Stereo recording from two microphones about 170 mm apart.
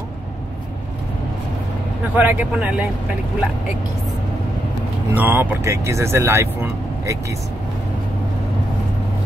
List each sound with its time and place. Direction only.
2.1 s speech: 10° right (ahead or behind)
5.1 s speech: 10° right (ahead or behind)